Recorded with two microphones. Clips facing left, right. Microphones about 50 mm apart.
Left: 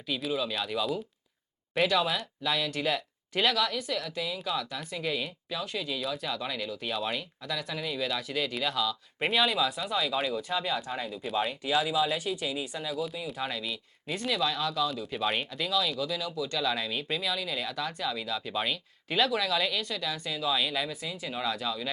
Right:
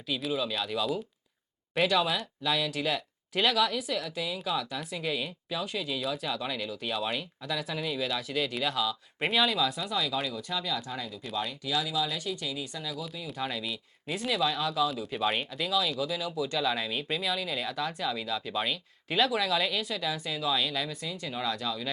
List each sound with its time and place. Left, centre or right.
0.1 s speech: centre
10.9 s speech: left
13.2 s speech: centre